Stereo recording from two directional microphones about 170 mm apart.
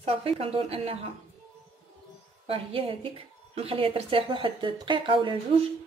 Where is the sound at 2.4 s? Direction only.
35° right (ahead or behind).